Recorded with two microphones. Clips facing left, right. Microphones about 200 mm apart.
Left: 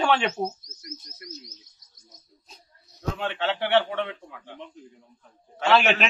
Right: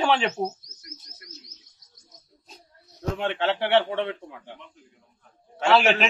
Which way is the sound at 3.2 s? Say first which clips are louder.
Right 3 dB; 25° right (ahead or behind).